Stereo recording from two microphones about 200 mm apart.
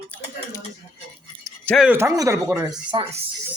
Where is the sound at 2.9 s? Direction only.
25° right (ahead or behind).